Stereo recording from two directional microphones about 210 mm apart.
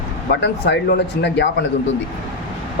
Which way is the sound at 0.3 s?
55° left (ahead or behind).